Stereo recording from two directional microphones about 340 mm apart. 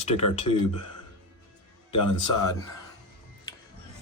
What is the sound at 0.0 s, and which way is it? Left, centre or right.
Speech, centre.